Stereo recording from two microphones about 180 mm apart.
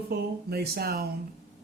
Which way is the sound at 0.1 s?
60° right (ahead or behind).